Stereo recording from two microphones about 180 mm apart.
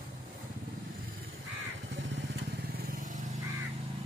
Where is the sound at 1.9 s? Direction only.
80° right; by 3.2 s 50° right (ahead or behind).